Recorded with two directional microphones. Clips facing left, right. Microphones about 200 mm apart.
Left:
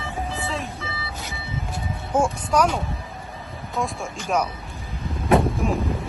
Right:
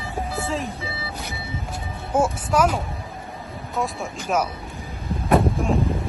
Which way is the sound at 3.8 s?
Centre (ahead or behind).